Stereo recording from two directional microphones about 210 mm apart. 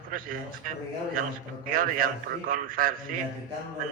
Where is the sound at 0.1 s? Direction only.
40° right (ahead or behind).